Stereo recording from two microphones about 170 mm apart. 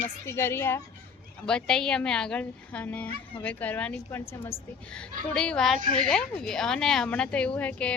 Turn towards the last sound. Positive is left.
turn(degrees=10)  # may be behind; listen again after turning